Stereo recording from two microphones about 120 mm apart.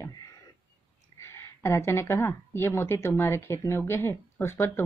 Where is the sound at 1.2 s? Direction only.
20° left (ahead or behind).